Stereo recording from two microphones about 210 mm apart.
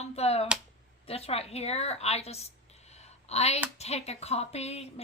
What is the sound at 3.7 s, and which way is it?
Speech, 30° left (ahead or behind).